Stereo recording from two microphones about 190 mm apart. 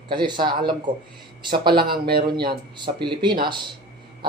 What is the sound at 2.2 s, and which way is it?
Speech, 25° right (ahead or behind).